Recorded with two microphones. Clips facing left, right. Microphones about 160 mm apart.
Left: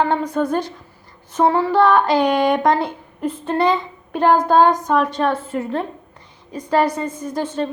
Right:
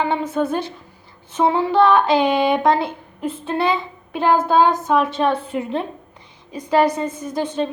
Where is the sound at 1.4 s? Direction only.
15° right (ahead or behind).